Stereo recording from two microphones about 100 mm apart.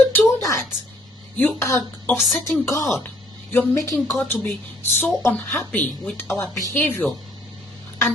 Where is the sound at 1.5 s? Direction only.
25° left (ahead or behind).